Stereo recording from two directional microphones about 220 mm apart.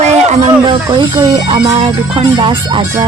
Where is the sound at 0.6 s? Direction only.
20° right (ahead or behind).